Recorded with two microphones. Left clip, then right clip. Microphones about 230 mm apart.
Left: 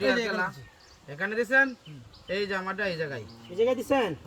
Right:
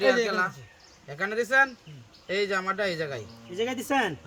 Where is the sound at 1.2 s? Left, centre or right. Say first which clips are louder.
Right 1 dB; right.